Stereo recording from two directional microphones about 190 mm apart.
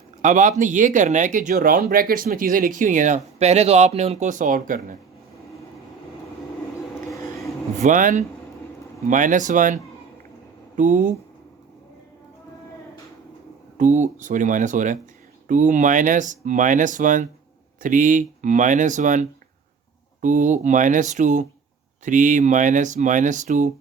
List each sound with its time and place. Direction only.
0.2 s speech: 40° right (ahead or behind)
7.8 s speech: 45° right (ahead or behind)
13.7 s speech: 40° right (ahead or behind)